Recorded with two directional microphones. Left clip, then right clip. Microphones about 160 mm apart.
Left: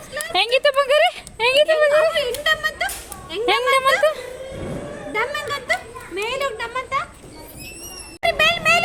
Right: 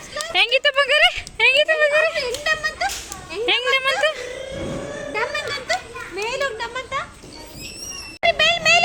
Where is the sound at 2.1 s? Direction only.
50° left (ahead or behind).